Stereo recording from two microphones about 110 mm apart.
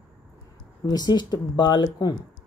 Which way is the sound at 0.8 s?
40° left (ahead or behind).